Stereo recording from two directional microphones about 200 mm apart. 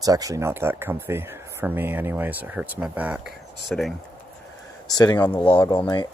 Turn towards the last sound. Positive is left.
turn(degrees=25)  # may be behind; listen again after turning